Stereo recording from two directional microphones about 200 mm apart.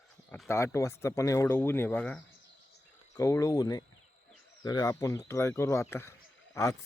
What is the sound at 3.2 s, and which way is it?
Speech, 15° left (ahead or behind).